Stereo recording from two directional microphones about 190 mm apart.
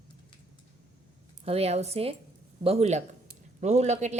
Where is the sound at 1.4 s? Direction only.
30° right (ahead or behind).